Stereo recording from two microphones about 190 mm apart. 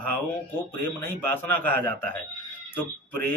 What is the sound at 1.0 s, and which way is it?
Speech, 10° left (ahead or behind).